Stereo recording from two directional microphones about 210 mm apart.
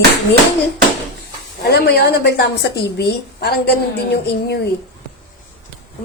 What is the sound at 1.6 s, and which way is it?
Speech, 50° left (ahead or behind).